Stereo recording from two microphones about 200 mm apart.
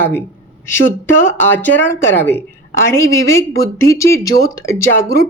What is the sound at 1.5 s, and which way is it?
Speech, 10° left (ahead or behind).